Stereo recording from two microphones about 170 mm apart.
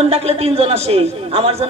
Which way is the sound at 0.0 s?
35° right (ahead or behind).